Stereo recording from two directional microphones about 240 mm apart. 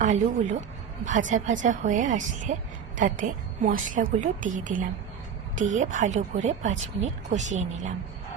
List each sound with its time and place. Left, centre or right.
0.0 s a woman's voice: right